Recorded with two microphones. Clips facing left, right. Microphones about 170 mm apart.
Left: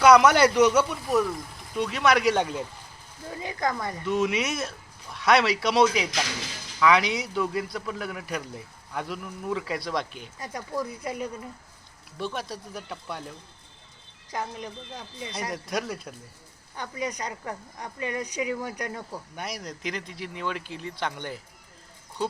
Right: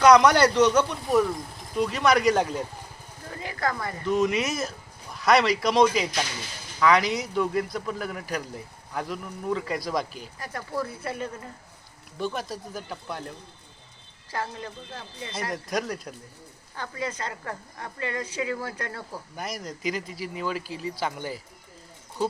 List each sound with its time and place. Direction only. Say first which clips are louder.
0.0 s speech: even; 5° left (ahead or behind)
3.4 s speech: even; 20° left (ahead or behind)
4.0 s speech: right 2 dB; centre (ahead or behind)
10.3 s speech: even; 20° left (ahead or behind)
12.2 s speech: right 2 dB; centre (ahead or behind)
14.3 s speech: even; 15° left (ahead or behind)
15.4 s speech: right 2 dB; centre (ahead or behind)
16.7 s speech: even; 15° left (ahead or behind)
19.4 s speech: right 2 dB; centre (ahead or behind)